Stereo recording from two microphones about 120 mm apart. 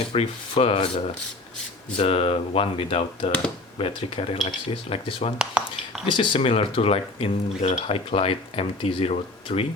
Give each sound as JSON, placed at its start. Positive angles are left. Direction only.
{"t": 0.0, "sound": "speech", "side_deg": 55}
{"t": 5.6, "sound": "a sound", "side_deg": -10}
{"t": 6.1, "sound": "speech", "side_deg": 45}